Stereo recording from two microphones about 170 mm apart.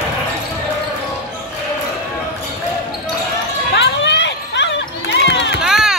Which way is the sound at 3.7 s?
90° left.